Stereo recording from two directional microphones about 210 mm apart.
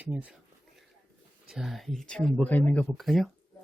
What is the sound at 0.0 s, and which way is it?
Speech, 5° right (ahead or behind).